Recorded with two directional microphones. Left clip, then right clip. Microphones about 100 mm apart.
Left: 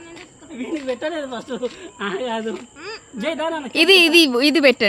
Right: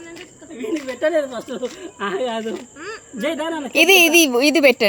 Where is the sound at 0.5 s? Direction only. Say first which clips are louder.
Even; 15° left (ahead or behind).